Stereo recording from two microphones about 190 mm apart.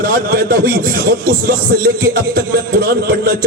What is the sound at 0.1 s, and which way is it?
A man's voice, 50° right (ahead or behind).